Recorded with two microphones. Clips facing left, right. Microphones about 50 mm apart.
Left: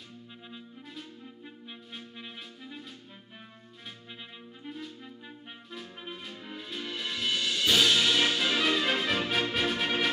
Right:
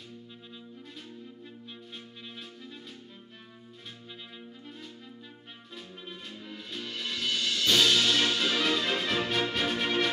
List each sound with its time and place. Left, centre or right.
1.7 s clarinet: centre
5.7 s music: centre